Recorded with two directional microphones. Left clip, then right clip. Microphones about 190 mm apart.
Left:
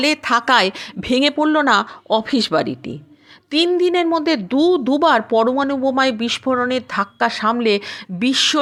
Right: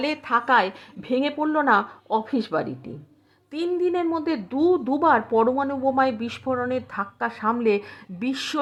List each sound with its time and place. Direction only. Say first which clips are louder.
0.0 s speech: left 7 dB; 25° left (ahead or behind)